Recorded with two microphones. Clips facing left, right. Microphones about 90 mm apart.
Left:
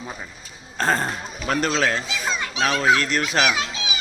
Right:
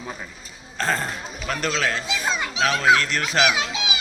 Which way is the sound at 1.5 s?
35° left (ahead or behind).